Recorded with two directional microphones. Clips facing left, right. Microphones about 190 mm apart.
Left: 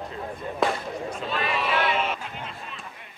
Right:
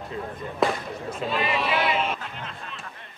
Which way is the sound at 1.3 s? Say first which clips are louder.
Right 1 dB; 10° right (ahead or behind).